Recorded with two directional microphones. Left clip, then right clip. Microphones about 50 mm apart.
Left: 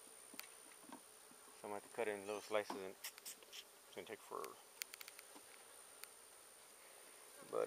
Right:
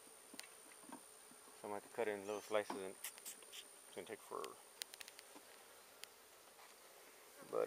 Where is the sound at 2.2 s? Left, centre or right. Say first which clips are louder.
Right 1 dB; centre.